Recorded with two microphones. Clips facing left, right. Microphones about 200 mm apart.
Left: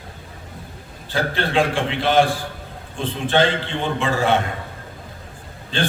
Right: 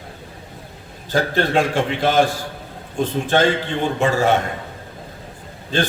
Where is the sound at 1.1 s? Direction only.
45° right (ahead or behind).